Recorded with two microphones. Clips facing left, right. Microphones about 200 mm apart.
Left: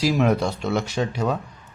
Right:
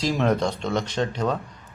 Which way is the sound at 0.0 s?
5° left (ahead or behind).